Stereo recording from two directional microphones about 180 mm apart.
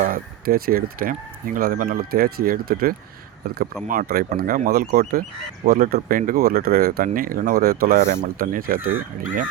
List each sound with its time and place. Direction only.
0.0 s speech: 55° right (ahead or behind)